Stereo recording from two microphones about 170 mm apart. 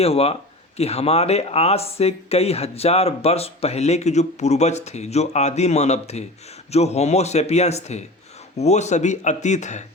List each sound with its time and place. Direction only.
0.0 s speech: 35° left (ahead or behind)